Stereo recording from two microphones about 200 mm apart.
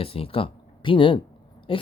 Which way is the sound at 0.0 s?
30° left (ahead or behind).